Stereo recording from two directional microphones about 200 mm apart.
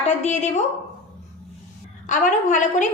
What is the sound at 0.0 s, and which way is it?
Speech, 35° left (ahead or behind).